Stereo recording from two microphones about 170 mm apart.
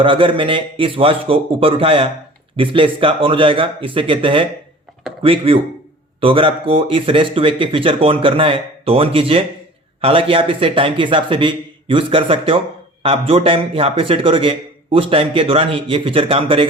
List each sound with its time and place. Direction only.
0.0 s speech: 30° right (ahead or behind)